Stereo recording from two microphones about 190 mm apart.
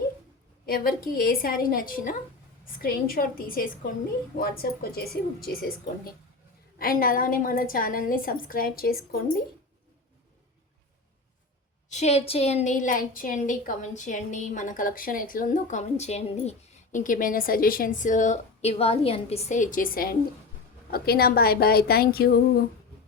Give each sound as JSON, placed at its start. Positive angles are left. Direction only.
{"t": 0.6, "sound": "a woman's voice", "side_deg": 50}
{"t": 11.9, "sound": "a woman's voice", "side_deg": 35}